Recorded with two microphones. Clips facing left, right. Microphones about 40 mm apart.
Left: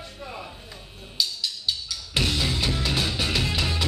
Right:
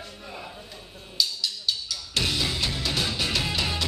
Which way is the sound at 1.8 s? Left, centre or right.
Centre.